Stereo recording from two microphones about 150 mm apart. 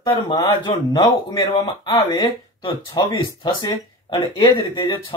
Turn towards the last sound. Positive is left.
turn(degrees=30)  # may be behind; listen again after turning